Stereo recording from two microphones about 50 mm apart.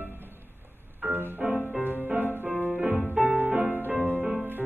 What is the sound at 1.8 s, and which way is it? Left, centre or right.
Music, right.